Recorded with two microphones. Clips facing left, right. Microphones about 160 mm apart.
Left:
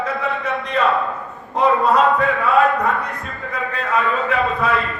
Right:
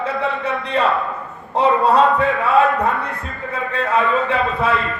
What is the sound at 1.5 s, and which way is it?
Speech, 30° right (ahead or behind).